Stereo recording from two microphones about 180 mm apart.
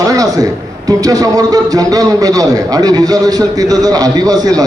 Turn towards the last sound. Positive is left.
turn(degrees=-20)  # may be behind; listen again after turning